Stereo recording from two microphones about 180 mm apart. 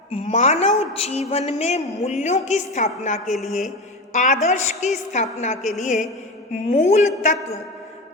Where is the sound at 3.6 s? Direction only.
40° left (ahead or behind).